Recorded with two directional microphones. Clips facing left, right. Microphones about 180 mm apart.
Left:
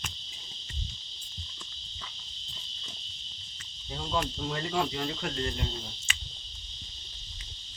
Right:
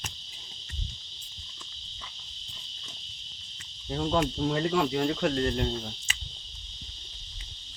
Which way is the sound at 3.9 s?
50° right (ahead or behind).